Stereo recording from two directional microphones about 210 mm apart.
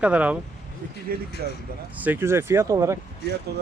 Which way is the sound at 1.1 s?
45° right (ahead or behind).